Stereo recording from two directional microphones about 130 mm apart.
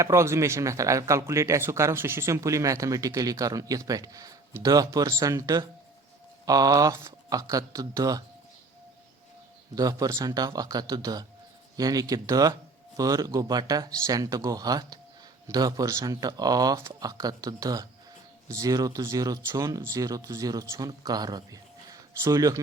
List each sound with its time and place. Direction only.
0.0 s speech: 20° right (ahead or behind)
9.7 s speech: 30° right (ahead or behind)